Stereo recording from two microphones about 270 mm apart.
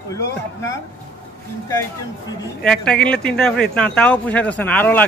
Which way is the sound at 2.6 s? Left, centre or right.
Centre.